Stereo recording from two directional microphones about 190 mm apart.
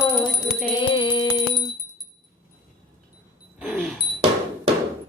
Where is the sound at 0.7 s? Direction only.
25° left (ahead or behind).